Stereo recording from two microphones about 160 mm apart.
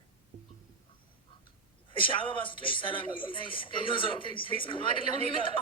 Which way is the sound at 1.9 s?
30° left (ahead or behind).